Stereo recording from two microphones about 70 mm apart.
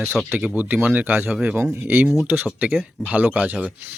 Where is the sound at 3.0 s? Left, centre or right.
Right.